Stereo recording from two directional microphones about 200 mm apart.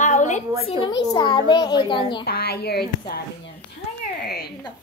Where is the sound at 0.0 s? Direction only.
35° left (ahead or behind).